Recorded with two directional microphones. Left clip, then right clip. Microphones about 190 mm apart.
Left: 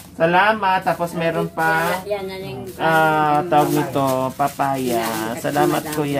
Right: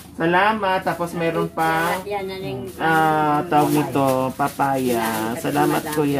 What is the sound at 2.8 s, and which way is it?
Speech, 10° right (ahead or behind).